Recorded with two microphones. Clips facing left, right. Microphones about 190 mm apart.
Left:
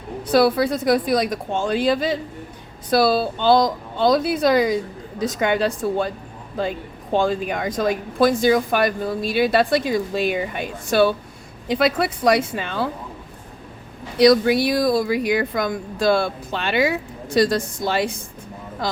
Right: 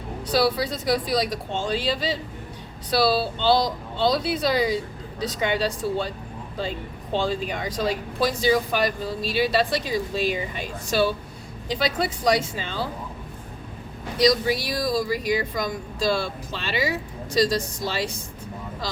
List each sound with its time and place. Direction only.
0.3 s a woman's voice: 50° left (ahead or behind)
14.2 s speech: 60° left (ahead or behind)